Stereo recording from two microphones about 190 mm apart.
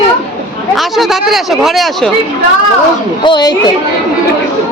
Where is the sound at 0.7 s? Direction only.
Centre (ahead or behind).